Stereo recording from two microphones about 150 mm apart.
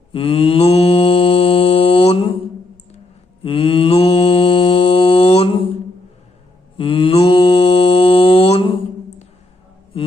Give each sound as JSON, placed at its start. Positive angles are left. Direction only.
{"t": 0.1, "sound": "mantra", "side_deg": 35}
{"t": 3.4, "sound": "mantra", "side_deg": 35}
{"t": 6.7, "sound": "mantra", "side_deg": 35}